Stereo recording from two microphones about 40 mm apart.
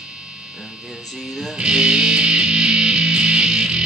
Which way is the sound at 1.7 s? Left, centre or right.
Right.